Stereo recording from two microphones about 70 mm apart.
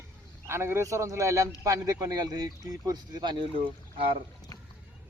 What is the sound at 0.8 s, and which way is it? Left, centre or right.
Speech, right.